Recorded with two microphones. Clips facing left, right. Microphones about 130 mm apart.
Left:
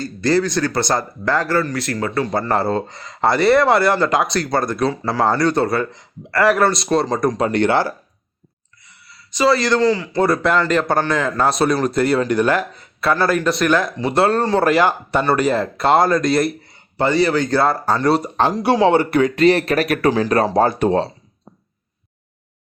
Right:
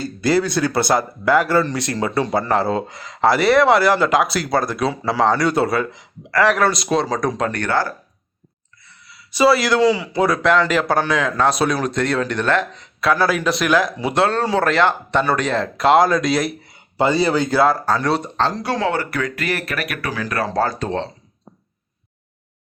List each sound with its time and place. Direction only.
0.2 s speech: 10° right (ahead or behind)
2.5 s speech: centre (ahead or behind)
7.5 s speech: 20° left (ahead or behind)
8.8 s a sound: 15° left (ahead or behind)
9.3 s speech: 10° right (ahead or behind)
16.7 s a man's voice: 15° right (ahead or behind)
17.6 s speech: centre (ahead or behind)
18.6 s speech: 20° left (ahead or behind)